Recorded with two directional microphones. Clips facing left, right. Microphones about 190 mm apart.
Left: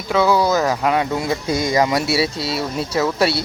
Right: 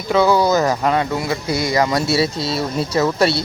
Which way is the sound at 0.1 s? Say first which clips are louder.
Right 2 dB; centre (ahead or behind).